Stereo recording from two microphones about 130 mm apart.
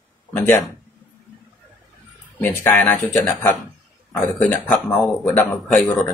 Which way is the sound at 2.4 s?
15° left (ahead or behind).